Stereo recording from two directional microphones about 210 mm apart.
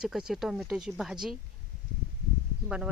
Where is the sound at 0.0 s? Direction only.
5° right (ahead or behind).